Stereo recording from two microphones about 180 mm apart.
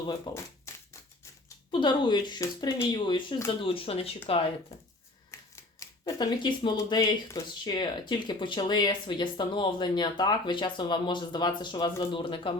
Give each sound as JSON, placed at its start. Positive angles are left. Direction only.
{"t": 0.3, "sound": "speech", "side_deg": 25}
{"t": 0.7, "sound": "scissors", "side_deg": 15}
{"t": 1.7, "sound": "speech", "side_deg": 25}
{"t": 5.3, "sound": "typewriter", "side_deg": 15}
{"t": 5.8, "sound": "speech", "side_deg": 20}